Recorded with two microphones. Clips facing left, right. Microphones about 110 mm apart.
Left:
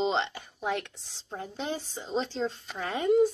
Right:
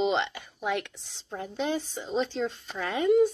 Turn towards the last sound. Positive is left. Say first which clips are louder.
# right 1 dB
turn(degrees=35)  # may be behind; listen again after turning